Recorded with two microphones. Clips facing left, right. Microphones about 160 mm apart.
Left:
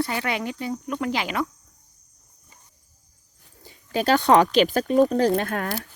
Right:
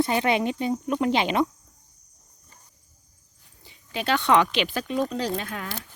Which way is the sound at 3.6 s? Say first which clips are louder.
Left 7 dB; 40° left (ahead or behind).